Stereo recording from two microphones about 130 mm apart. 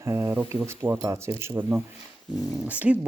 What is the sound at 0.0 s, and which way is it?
Speech, 20° right (ahead or behind).